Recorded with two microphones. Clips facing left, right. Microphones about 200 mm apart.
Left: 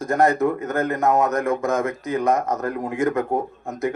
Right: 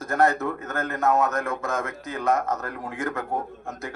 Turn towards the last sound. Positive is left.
turn(degrees=15)  # may be behind; listen again after turning